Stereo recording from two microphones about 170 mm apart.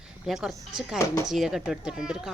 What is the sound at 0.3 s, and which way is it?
Speech, centre (ahead or behind).